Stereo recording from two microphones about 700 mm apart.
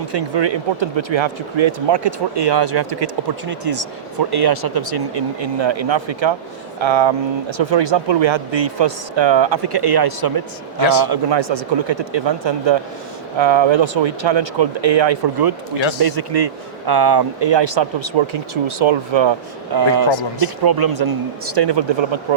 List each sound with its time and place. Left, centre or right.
0.1 s a man's voice: right
3.5 s a man's voice: right